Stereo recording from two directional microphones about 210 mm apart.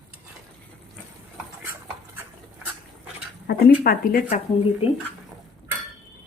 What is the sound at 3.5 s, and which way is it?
Speech, 45° left (ahead or behind).